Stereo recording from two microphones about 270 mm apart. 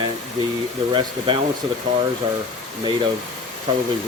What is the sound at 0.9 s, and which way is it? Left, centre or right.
Speech, centre.